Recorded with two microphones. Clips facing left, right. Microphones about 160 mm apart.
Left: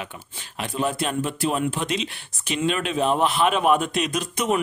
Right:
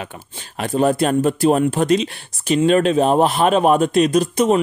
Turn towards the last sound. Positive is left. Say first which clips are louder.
# right 8 dB
turn(degrees=-35)  # may be behind; listen again after turning